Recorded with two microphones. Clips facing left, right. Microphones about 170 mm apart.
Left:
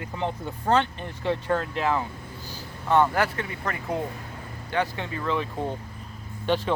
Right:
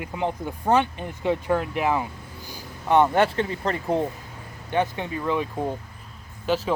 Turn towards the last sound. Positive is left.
turn(degrees=-5)  # may be behind; listen again after turning